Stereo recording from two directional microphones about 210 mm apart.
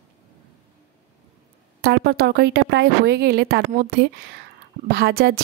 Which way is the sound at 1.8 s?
50° right (ahead or behind).